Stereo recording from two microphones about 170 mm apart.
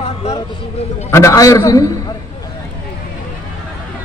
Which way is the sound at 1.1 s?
15° left (ahead or behind).